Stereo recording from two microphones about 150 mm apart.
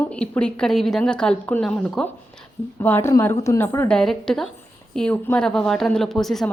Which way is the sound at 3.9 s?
5° left (ahead or behind).